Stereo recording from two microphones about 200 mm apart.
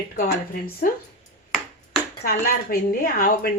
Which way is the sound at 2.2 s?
50° left (ahead or behind).